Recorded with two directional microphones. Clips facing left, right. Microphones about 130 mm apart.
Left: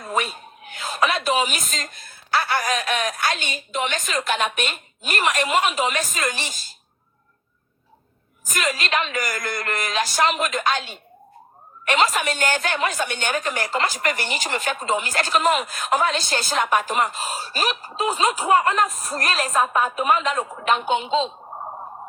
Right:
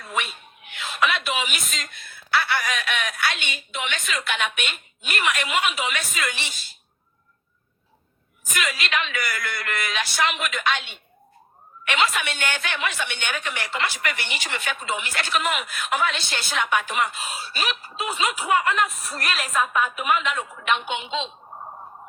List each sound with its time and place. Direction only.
0.0 s speech: 40° left (ahead or behind)
8.4 s a woman's voice: 40° left (ahead or behind)